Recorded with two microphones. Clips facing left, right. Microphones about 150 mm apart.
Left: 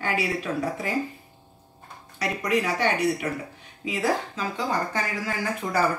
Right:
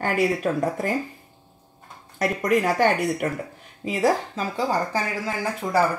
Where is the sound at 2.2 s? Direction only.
45° right (ahead or behind).